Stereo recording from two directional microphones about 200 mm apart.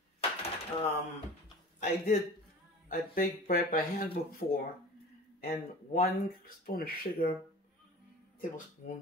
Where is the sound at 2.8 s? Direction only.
45° left (ahead or behind).